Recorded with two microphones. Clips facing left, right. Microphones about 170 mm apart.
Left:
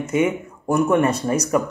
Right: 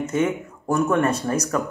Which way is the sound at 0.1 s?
10° left (ahead or behind).